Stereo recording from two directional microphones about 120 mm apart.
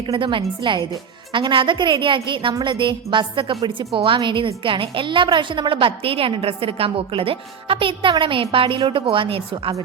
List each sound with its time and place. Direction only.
0.1 s a woman's voice: 45° right (ahead or behind)